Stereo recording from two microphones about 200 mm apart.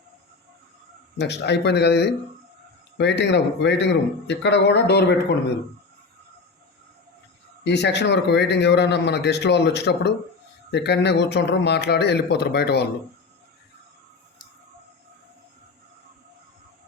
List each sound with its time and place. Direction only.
1.2 s a man's voice: 60° left (ahead or behind)
7.6 s a man's voice: 60° left (ahead or behind)